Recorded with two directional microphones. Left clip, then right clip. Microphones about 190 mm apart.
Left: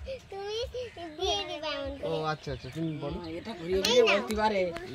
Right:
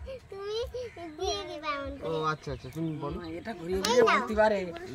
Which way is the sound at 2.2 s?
5° right (ahead or behind).